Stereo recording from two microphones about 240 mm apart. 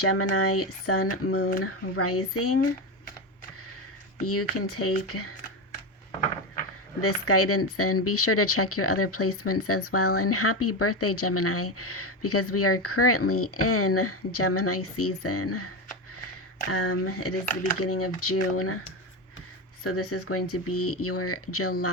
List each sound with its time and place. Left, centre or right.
0.0 s speech: left
4.3 s speech: left
7.0 s speech: left
17.4 s speech: left
17.7 s speech: left
19.8 s speech: left